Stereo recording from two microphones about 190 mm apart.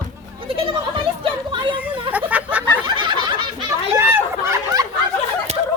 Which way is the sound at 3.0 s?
25° right (ahead or behind).